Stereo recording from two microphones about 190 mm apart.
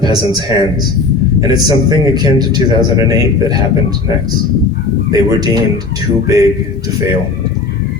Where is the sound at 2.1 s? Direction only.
20° right (ahead or behind).